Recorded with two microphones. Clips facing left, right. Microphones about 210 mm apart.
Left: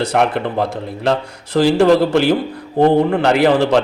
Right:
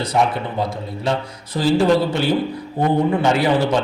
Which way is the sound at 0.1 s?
70° left (ahead or behind).